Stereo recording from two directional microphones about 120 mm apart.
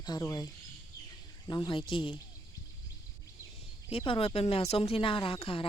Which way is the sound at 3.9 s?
50° left (ahead or behind).